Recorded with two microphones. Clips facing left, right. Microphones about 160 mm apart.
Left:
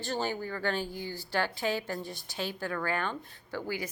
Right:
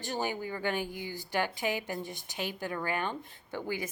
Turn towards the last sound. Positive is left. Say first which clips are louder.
# even
turn(degrees=-20)  # may be behind; listen again after turning